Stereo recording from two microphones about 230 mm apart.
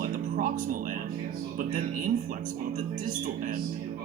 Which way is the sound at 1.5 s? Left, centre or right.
Right.